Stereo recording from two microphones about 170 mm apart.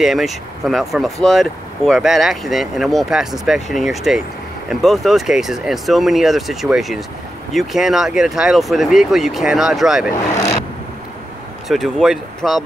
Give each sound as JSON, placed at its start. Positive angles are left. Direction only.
{"t": 0.0, "sound": "speech", "side_deg": 0}
{"t": 11.7, "sound": "speech", "side_deg": 0}